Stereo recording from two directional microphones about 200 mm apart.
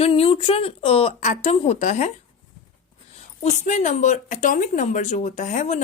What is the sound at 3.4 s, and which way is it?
Speech, 35° left (ahead or behind).